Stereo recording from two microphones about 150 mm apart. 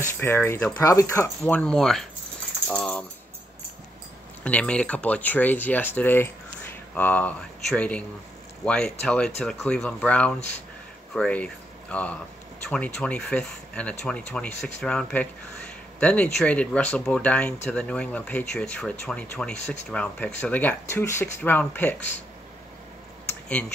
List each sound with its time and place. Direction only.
0.0 s speech: 15° left (ahead or behind)
1.4 s speech: 5° left (ahead or behind)
2.7 s typing: 10° left (ahead or behind)
4.5 s speech: 10° left (ahead or behind)